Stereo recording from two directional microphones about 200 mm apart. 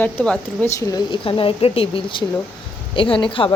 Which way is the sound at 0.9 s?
25° left (ahead or behind).